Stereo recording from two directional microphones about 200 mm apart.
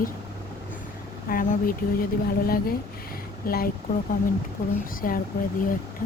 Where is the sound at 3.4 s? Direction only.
50° left (ahead or behind).